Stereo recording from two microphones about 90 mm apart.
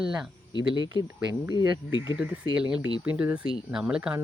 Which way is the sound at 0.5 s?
60° left (ahead or behind).